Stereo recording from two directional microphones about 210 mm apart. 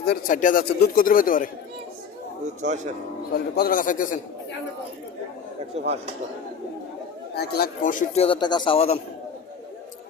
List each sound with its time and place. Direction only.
0.0 s speech: 45° left (ahead or behind)
2.6 s speech: 35° right (ahead or behind)
3.3 s speech: 45° left (ahead or behind)
5.7 s speech: 30° right (ahead or behind)
7.3 s speech: 50° left (ahead or behind); by 9.0 s 25° left (ahead or behind)